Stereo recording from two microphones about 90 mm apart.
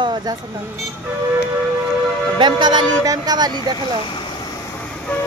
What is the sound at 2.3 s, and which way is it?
Speech, 55° right (ahead or behind).